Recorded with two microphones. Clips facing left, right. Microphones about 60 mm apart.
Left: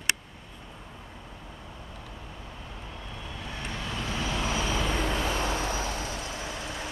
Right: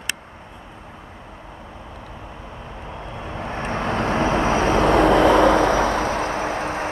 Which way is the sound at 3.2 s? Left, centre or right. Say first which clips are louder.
Right 11 dB; right.